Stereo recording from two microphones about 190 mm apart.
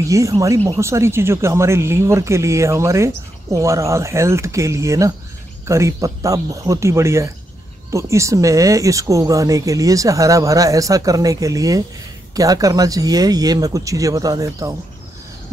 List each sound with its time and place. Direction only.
0.1 s speech: 15° right (ahead or behind)